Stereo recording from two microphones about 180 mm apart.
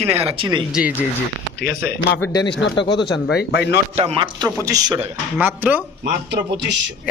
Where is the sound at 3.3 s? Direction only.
65° left (ahead or behind).